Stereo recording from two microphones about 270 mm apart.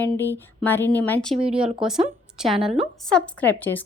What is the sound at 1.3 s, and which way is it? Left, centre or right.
Speech, right.